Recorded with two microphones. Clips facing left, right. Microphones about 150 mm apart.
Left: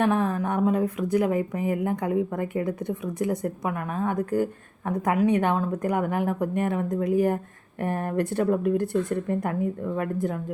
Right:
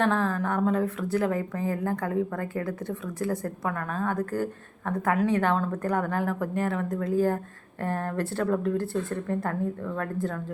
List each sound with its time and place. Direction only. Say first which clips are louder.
0.0 s a woman's voice: left 2 dB; 15° left (ahead or behind)